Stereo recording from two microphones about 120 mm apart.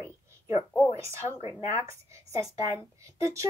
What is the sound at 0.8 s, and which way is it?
A child's voice, 25° right (ahead or behind).